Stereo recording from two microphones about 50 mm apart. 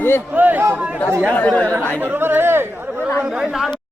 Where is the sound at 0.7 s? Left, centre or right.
Right.